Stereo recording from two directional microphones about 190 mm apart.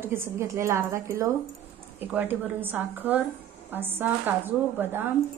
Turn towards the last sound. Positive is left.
turn(degrees=-10)  # may be behind; listen again after turning